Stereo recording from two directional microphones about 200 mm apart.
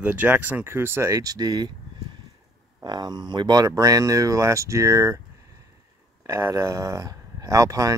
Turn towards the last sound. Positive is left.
turn(degrees=-15)  # may be behind; listen again after turning